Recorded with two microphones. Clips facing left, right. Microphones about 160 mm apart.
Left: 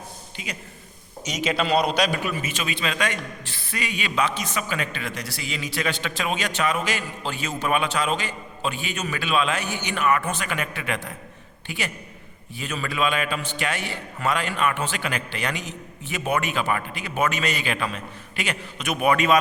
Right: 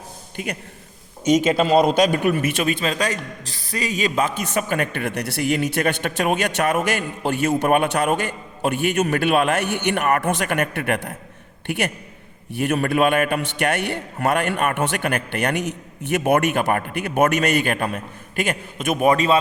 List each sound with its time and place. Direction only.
0.4 s a man's voice: 55° right (ahead or behind); by 19.4 s 35° right (ahead or behind)